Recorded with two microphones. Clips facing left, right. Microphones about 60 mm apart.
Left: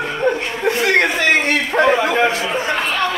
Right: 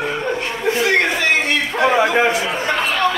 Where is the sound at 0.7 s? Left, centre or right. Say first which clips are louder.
Left 1 dB; left.